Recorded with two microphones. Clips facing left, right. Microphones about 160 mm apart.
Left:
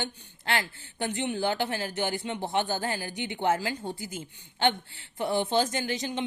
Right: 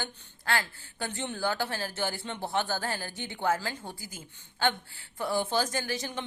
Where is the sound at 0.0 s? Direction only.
20° left (ahead or behind).